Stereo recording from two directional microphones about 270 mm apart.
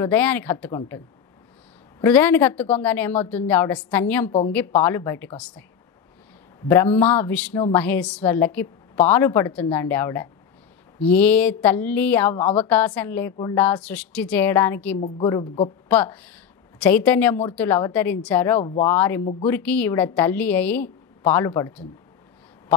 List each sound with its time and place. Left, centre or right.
0.0 s a woman's voice: centre
6.7 s a woman's voice: centre
15.0 s a woman's voice: left
15.2 s a woman's voice: centre